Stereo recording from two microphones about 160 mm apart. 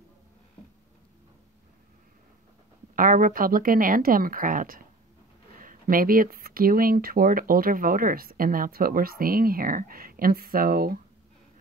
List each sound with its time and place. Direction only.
3.0 s speech: 60° right (ahead or behind)